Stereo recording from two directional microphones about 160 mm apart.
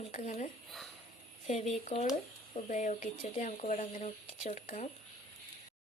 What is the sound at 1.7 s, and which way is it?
Speech, 40° left (ahead or behind).